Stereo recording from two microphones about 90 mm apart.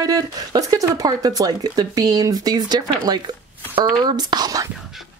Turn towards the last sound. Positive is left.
turn(degrees=-45)  # may be behind; listen again after turning